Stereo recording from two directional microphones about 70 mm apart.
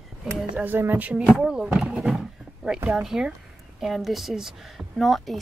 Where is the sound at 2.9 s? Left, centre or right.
Centre.